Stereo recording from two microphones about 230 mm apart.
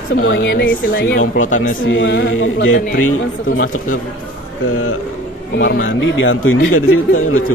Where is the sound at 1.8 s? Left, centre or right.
Left.